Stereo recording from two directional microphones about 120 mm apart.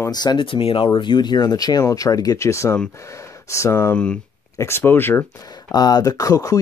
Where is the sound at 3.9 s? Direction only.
10° left (ahead or behind).